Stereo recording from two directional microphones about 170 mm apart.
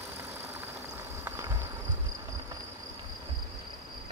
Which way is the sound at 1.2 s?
15° right (ahead or behind).